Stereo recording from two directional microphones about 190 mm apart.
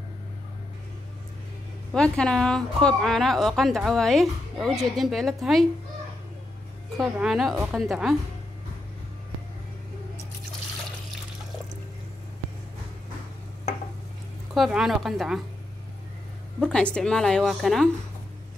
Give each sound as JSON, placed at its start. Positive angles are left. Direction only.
{"t": 2.0, "sound": "a woman's voice", "side_deg": 5}
{"t": 7.0, "sound": "a woman's voice", "side_deg": 0}
{"t": 14.5, "sound": "a woman's voice", "side_deg": 0}
{"t": 16.5, "sound": "a woman's voice", "side_deg": 5}